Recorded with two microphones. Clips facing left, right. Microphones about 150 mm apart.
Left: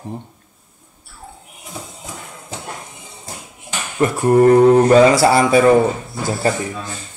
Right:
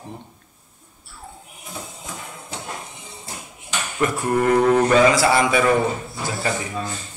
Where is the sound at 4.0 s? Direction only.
35° left (ahead or behind).